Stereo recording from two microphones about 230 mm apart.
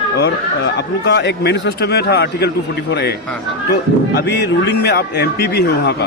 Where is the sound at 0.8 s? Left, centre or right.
Left.